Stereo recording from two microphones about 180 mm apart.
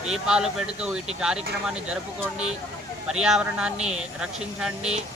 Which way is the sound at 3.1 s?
5° right (ahead or behind).